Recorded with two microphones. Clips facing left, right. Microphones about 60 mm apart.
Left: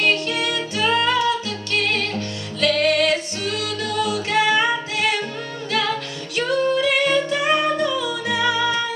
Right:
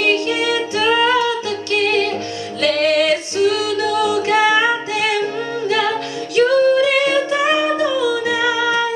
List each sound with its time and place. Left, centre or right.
0.3 s music: centre
2.6 s music: centre
6.3 s music: centre